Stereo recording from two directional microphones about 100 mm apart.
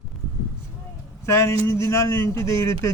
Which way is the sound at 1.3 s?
25° left (ahead or behind).